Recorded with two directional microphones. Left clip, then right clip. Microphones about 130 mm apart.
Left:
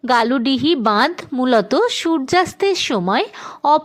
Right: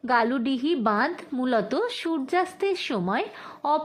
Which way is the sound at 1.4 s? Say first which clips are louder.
Left 10 dB; 40° left (ahead or behind).